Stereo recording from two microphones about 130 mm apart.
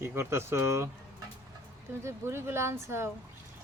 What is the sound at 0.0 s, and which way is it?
Speech, 20° right (ahead or behind).